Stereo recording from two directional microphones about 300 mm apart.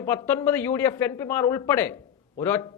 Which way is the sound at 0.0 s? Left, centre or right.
Centre.